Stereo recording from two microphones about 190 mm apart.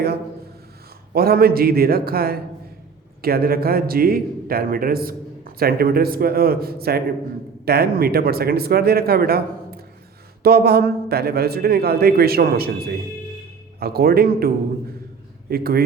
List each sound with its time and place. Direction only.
1.1 s a man's voice: 55° right (ahead or behind)